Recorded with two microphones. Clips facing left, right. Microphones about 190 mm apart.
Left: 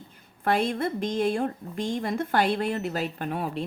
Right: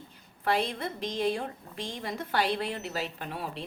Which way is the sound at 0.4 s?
50° left (ahead or behind).